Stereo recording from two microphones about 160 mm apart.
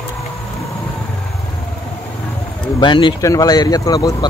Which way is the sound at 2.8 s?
30° left (ahead or behind).